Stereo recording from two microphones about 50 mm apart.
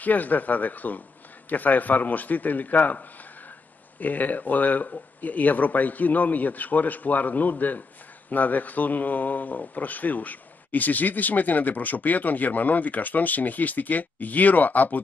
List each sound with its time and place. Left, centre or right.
0.0 s a man's voice: left